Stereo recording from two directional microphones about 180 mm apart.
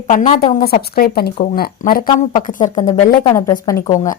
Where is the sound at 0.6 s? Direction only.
55° left (ahead or behind).